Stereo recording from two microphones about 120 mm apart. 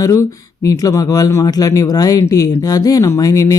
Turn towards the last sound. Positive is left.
turn(degrees=30)  # may be behind; listen again after turning